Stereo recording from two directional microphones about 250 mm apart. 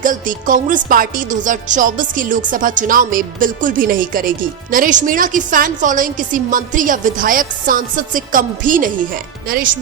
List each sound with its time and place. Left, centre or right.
0.0 s music: right